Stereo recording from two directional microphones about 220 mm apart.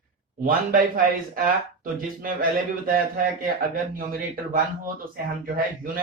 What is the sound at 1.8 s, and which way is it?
Speech, 40° right (ahead or behind).